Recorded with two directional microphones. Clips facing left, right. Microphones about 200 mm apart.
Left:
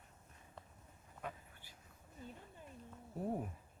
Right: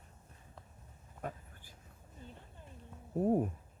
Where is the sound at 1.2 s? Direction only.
45° right (ahead or behind).